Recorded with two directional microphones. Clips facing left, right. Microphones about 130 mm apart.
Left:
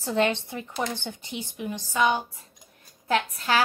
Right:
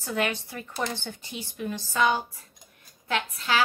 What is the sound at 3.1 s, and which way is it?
Speech, 40° left (ahead or behind).